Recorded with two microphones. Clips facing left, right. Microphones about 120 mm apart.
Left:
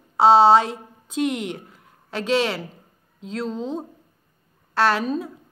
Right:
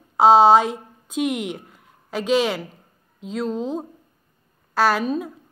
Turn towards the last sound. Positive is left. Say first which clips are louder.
# right 1 dB
turn(degrees=-5)  # may be behind; listen again after turning